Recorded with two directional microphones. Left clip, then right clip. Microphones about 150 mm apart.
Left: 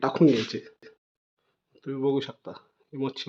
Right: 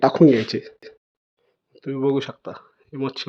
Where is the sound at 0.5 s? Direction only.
35° right (ahead or behind).